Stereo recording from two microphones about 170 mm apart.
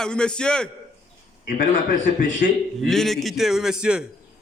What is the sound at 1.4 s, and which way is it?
A man's voice, 55° left (ahead or behind).